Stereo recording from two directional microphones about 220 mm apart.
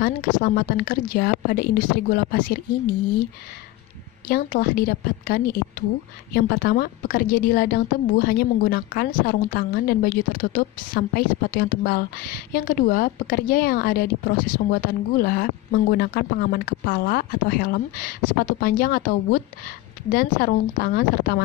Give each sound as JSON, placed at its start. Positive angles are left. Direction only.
{"t": 0.0, "sound": "a woman's voice", "side_deg": 40}
{"t": 4.3, "sound": "a woman's voice", "side_deg": 40}